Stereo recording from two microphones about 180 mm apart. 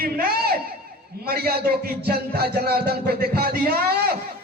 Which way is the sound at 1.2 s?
60° right (ahead or behind).